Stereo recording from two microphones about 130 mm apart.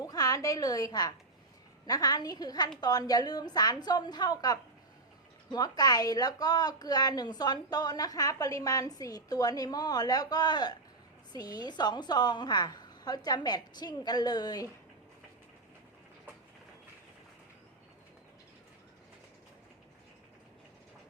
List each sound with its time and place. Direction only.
0.0 s a woman's voice: 30° left (ahead or behind)